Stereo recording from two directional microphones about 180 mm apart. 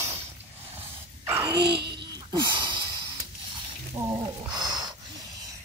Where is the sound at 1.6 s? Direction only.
65° right (ahead or behind).